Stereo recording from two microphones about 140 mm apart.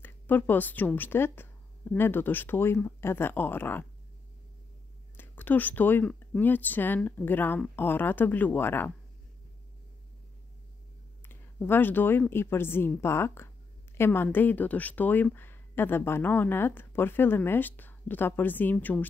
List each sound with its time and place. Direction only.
0.0 s speech: 15° left (ahead or behind)
5.1 s speech: 15° left (ahead or behind)
11.2 s speech: 15° left (ahead or behind)